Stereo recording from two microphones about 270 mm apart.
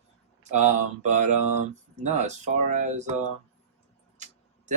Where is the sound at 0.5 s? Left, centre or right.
Right.